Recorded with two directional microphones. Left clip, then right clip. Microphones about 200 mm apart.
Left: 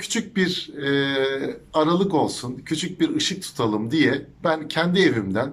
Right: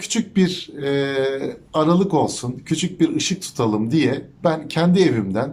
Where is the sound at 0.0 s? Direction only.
10° right (ahead or behind).